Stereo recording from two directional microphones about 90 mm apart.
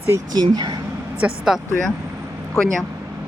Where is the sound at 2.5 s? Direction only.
5° left (ahead or behind).